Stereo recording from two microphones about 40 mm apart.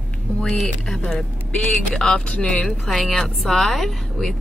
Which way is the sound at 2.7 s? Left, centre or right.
Centre.